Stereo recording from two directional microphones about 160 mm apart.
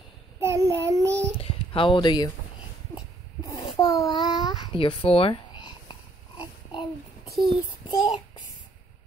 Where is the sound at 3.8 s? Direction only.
20° left (ahead or behind).